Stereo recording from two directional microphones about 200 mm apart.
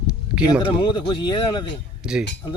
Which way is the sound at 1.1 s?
25° left (ahead or behind).